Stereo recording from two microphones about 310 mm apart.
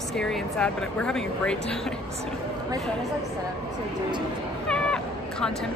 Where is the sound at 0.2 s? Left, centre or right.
Centre.